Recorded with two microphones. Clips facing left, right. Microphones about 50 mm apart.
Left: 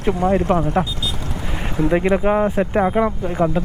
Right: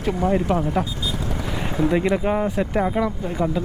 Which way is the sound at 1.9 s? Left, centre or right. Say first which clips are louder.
Left 5 dB; left.